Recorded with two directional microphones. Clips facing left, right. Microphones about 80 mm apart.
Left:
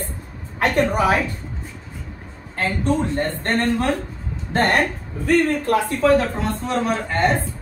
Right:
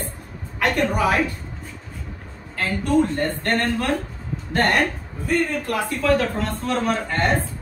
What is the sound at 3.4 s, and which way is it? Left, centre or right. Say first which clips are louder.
Speech: left 3 dB; left.